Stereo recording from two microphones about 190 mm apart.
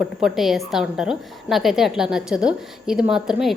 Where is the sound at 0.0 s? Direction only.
Centre (ahead or behind).